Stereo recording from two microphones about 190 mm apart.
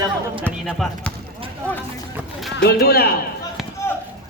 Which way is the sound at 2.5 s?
55° left (ahead or behind).